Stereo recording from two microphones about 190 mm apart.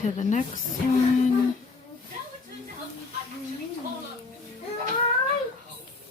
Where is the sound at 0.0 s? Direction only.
40° left (ahead or behind).